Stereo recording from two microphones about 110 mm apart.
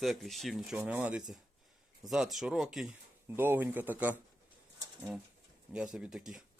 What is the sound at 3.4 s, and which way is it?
Speech, 20° right (ahead or behind).